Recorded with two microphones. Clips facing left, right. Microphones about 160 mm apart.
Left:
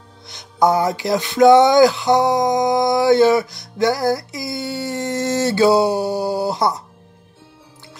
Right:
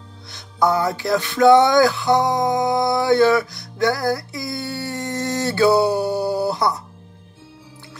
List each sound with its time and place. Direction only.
0.3 s music: 20° left (ahead or behind)